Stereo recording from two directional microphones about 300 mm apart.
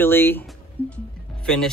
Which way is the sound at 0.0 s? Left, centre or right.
Centre.